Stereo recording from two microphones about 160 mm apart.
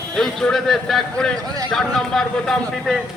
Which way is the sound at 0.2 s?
Centre (ahead or behind).